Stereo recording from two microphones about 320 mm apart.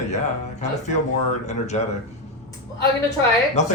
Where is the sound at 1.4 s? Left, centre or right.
Left.